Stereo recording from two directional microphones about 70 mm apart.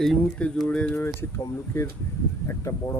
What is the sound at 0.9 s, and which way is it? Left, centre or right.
Speech, left.